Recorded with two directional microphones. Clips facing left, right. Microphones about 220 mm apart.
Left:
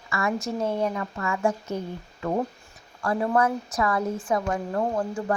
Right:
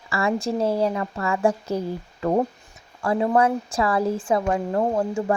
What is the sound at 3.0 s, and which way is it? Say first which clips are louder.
A woman's voice: right 3 dB; 20° right (ahead or behind).